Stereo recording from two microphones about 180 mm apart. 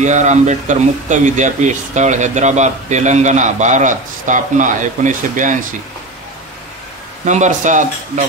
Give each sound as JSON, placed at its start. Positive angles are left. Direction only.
{"t": 0.0, "sound": "speech", "side_deg": -40}
{"t": 7.2, "sound": "speech", "side_deg": -40}